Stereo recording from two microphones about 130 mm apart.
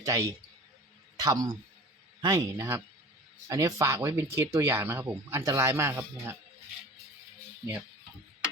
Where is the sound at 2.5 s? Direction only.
20° right (ahead or behind).